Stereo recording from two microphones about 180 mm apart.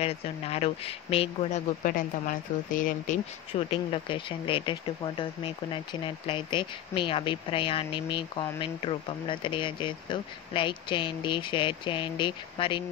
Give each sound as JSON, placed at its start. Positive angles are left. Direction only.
{"t": 0.0, "sound": "speech", "side_deg": 35}
{"t": 1.8, "sound": "speech", "side_deg": 50}
{"t": 3.5, "sound": "speech", "side_deg": 30}